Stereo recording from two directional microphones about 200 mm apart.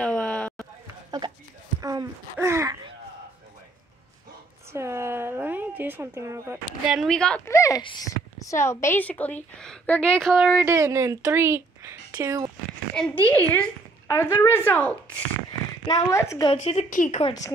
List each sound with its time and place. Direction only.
0.0 s a sound: 5° left (ahead or behind)
1.2 s a sound: 25° right (ahead or behind)
1.8 s speech: 20° right (ahead or behind)
4.7 s speech: 15° right (ahead or behind)
6.9 s a woman's voice: centre (ahead or behind)
10.6 s speech: 15° right (ahead or behind)
12.9 s a woman's voice: 5° left (ahead or behind)
16.5 s speech: 35° left (ahead or behind)
17.2 s a woman's voice: 20° left (ahead or behind)